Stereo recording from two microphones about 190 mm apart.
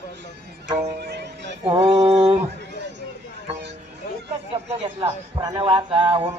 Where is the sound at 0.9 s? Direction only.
60° right (ahead or behind).